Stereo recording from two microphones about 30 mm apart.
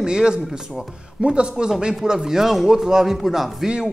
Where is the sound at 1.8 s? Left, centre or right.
Right.